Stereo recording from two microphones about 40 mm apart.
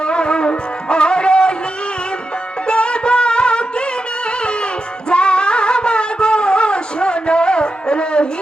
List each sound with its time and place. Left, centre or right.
0.0 s music: left
2.6 s music: left